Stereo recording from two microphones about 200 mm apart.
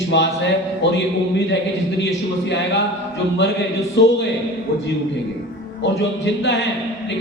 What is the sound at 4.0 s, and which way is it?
Speech, 60° left (ahead or behind).